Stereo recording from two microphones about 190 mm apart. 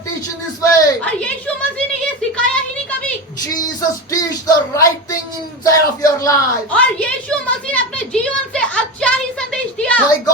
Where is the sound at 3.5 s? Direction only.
20° left (ahead or behind).